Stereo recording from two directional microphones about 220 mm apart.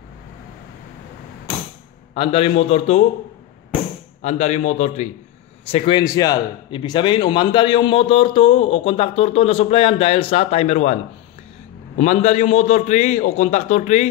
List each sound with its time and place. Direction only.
2.1 s speech: 25° left (ahead or behind)
4.2 s a man's voice: 30° left (ahead or behind)
12.0 s a man's voice: 30° left (ahead or behind)